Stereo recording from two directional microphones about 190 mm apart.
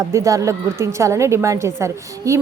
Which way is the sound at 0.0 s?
15° right (ahead or behind).